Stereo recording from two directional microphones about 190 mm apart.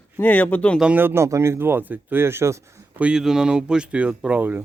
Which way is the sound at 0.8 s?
10° right (ahead or behind).